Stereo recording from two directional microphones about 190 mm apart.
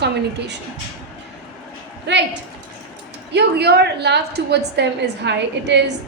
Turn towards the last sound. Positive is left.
turn(degrees=-65)  # may be behind; listen again after turning